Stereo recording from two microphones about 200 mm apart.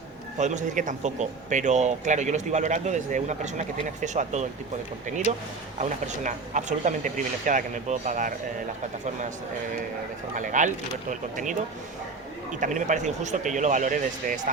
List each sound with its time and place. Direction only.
0.3 s speech: 35° right (ahead or behind)
10.3 s speech: 40° right (ahead or behind)